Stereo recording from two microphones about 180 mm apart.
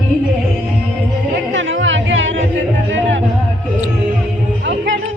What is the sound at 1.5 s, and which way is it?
Chatter, 90° right.